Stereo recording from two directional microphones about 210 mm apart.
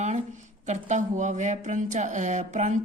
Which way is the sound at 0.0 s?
35° right (ahead or behind).